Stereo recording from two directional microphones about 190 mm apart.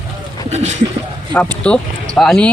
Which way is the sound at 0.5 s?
35° right (ahead or behind).